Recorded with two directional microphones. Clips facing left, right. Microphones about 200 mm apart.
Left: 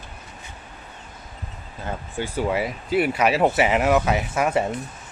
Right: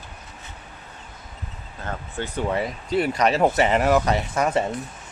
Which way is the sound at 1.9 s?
10° left (ahead or behind).